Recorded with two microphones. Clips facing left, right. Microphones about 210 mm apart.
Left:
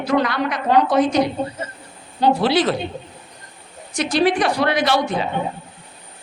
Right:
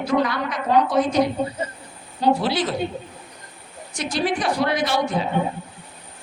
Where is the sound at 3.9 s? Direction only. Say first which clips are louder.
Left 6 dB; 80° left.